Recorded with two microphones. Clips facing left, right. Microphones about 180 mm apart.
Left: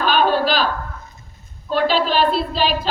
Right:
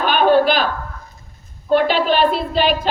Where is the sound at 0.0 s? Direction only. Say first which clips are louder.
Right 4 dB; 55° right (ahead or behind).